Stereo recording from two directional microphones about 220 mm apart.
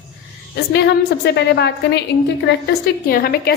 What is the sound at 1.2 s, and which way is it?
Speech, 50° left (ahead or behind).